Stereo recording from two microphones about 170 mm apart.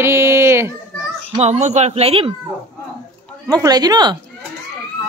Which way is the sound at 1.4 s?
40° right (ahead or behind).